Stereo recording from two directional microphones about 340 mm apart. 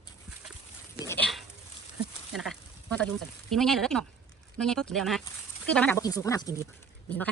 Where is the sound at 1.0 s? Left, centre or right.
Centre.